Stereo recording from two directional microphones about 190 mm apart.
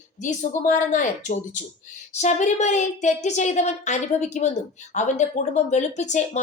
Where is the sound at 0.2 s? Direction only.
40° left (ahead or behind).